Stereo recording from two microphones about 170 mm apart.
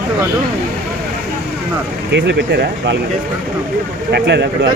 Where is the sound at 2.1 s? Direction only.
80° right.